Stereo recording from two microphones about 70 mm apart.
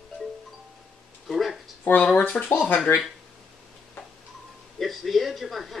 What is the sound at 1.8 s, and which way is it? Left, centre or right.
Speech, left.